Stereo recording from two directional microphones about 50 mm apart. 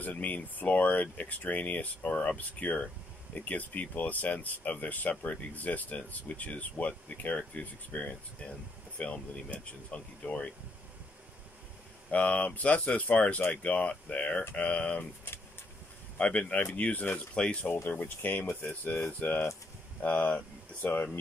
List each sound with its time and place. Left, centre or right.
0.0 s speech: left
12.1 s speech: left
16.2 s speech: left
18.0 s speech: left